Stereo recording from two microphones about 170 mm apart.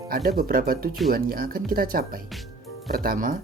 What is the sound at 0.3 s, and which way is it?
Speech, 55° right (ahead or behind).